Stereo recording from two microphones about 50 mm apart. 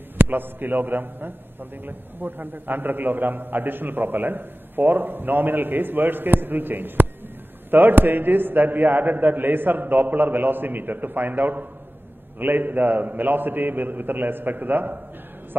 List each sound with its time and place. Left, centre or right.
0.2 s a man's voice: right